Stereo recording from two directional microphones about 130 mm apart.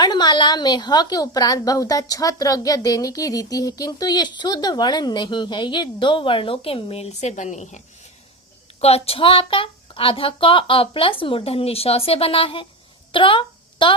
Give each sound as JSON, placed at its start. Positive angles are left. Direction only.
{"t": 0.0, "sound": "a woman's voice", "side_deg": 35}
{"t": 8.8, "sound": "a woman's voice", "side_deg": 50}
{"t": 13.1, "sound": "a sound", "side_deg": 40}